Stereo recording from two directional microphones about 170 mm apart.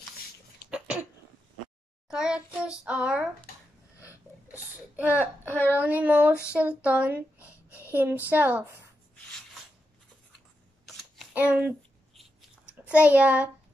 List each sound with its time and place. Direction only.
0.7 s cough: 5° right (ahead or behind)
2.0 s child singing: 5° right (ahead or behind)
4.9 s speech: 10° right (ahead or behind)
5.5 s speech: 10° left (ahead or behind)
5.8 s speech: 10° right (ahead or behind)
7.3 s a sound: 15° left (ahead or behind)
7.9 s speech: 10° right (ahead or behind)
11.3 s speech: 10° right (ahead or behind)
12.2 s a sound: 5° right (ahead or behind)